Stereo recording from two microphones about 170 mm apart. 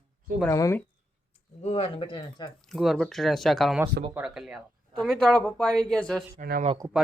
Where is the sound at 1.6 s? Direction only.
35° left (ahead or behind).